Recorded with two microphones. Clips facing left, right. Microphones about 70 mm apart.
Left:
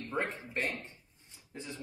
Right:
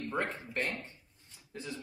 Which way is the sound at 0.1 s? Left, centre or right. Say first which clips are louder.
Left 1 dB; centre.